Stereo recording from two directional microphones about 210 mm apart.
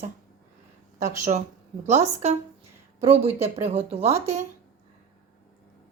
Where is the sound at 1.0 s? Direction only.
35° right (ahead or behind).